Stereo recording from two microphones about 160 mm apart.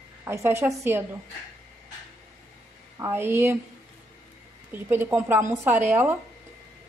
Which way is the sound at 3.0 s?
15° right (ahead or behind).